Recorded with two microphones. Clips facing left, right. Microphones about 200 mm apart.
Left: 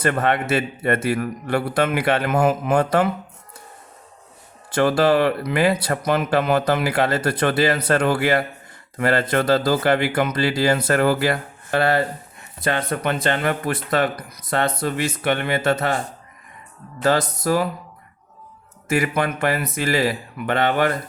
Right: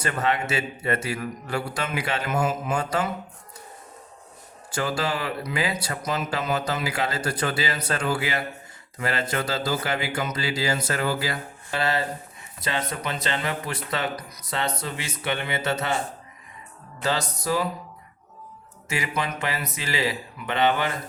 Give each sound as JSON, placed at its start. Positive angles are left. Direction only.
{"t": 0.0, "sound": "speech", "side_deg": 55}
{"t": 4.7, "sound": "speech", "side_deg": 60}
{"t": 17.0, "sound": "speech", "side_deg": 50}
{"t": 18.9, "sound": "speech", "side_deg": 55}